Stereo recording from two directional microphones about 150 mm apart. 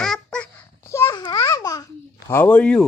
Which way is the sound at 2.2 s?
15° left (ahead or behind).